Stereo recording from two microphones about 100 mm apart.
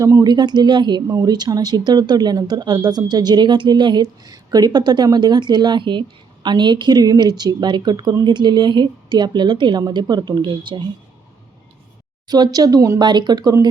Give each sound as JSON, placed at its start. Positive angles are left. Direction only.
{"t": 0.0, "sound": "speech", "side_deg": -40}
{"t": 1.0, "sound": "speech", "side_deg": -35}
{"t": 12.3, "sound": "speech", "side_deg": -40}
{"t": 13.0, "sound": "speech", "side_deg": -50}